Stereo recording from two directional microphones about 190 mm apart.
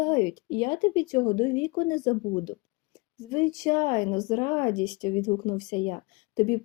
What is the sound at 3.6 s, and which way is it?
Speech, 20° left (ahead or behind).